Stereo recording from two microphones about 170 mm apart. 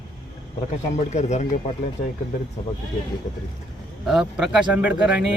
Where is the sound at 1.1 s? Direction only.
40° left (ahead or behind).